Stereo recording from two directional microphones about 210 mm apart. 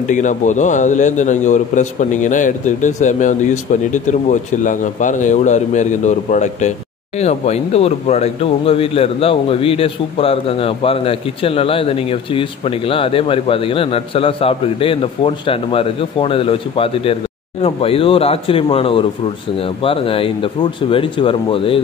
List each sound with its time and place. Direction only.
0.1 s a man's voice: 35° left (ahead or behind)